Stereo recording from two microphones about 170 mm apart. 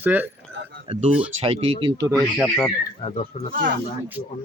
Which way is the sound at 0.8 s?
35° right (ahead or behind).